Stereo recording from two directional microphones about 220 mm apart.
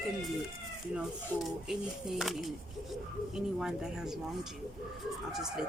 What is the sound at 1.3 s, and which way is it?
Speech, centre (ahead or behind).